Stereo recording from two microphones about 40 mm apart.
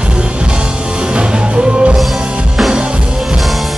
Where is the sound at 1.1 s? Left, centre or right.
Right.